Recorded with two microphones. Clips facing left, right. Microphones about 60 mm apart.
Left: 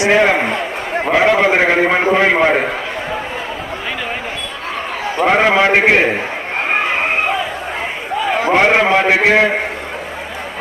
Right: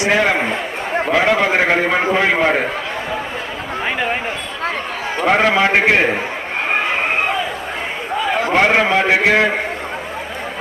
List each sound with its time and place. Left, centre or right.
0.0 s a man's voice: centre
5.2 s a man's voice: centre
8.4 s a man's voice: centre